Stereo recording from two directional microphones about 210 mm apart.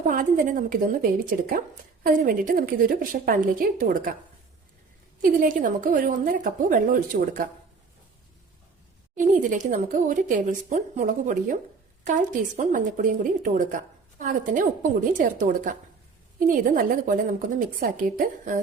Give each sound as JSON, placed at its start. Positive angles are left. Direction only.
{"t": 0.1, "sound": "a woman's voice", "side_deg": -40}
{"t": 5.2, "sound": "a woman's voice", "side_deg": -40}
{"t": 9.1, "sound": "a woman's voice", "side_deg": -40}